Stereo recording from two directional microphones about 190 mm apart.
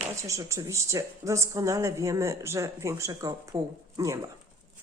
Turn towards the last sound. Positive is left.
turn(degrees=-20)  # may be behind; listen again after turning